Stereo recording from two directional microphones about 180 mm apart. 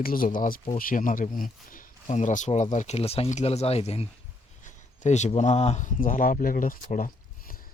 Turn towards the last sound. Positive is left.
turn(degrees=50)  # may be behind; listen again after turning